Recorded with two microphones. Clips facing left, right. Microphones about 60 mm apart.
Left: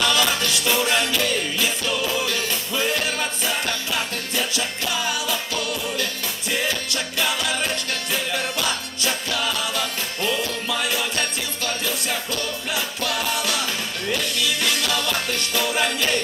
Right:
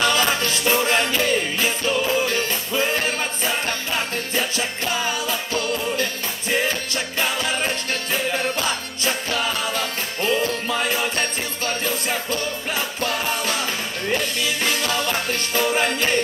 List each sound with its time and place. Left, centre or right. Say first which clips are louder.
0.0 s music: right 1 dB; right
6.5 s music: right 3 dB; right